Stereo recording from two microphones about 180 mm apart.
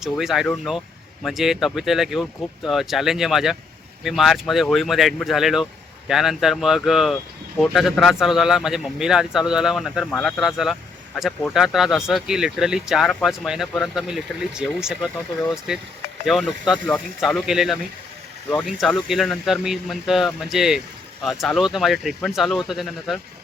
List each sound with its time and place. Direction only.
0.0 s speech: centre (ahead or behind)
19.0 s speech: centre (ahead or behind)